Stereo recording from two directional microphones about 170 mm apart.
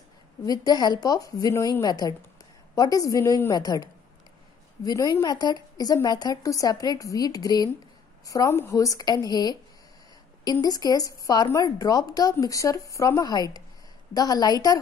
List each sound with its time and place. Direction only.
0.5 s a woman's voice: 25° left (ahead or behind)